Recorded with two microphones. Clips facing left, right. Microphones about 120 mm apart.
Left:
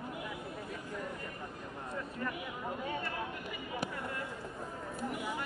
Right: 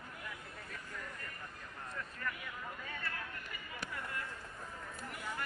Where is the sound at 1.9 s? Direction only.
20° left (ahead or behind).